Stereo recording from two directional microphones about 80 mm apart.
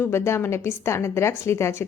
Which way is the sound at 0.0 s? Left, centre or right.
Left.